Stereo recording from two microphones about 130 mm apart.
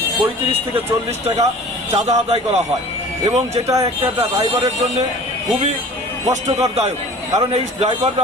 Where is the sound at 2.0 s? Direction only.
55° right (ahead or behind).